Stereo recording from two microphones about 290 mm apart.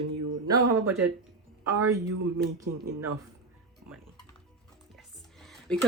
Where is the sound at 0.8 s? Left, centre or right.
Centre.